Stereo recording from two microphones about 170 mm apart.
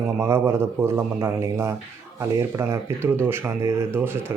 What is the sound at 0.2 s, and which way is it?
Speech, 15° right (ahead or behind).